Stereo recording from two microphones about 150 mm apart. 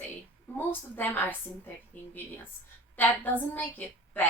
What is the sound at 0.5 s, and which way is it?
Speech, 15° left (ahead or behind).